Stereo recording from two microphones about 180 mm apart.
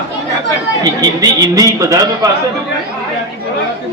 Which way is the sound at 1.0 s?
20° right (ahead or behind).